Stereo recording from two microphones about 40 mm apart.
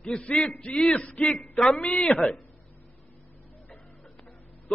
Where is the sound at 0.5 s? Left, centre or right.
Left.